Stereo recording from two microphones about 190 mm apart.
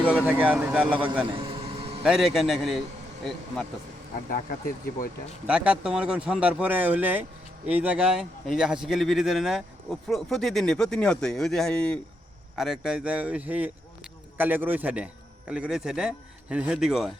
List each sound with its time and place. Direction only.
0.0 s speech: 10° left (ahead or behind)
0.3 s speech: 10° right (ahead or behind)
1.4 s vehicle: 30° right (ahead or behind)
2.0 s a man's voice: centre (ahead or behind)
5.5 s a man's voice: 5° right (ahead or behind)